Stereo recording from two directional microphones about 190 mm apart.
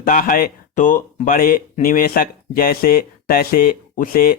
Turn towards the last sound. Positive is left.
turn(degrees=50)  # may be behind; listen again after turning